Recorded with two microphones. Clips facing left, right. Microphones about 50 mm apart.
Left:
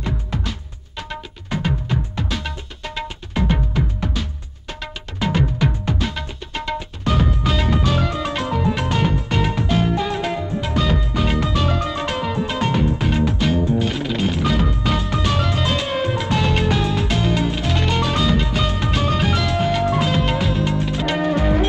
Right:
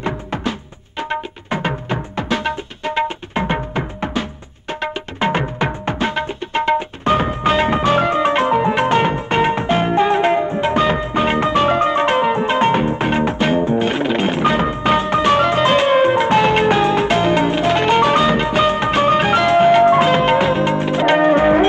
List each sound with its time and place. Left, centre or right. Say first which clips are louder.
0.0 s music: right 5 dB; right